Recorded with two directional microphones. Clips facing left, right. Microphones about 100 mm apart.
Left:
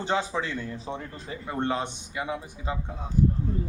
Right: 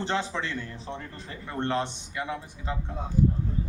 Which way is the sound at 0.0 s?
10° left (ahead or behind).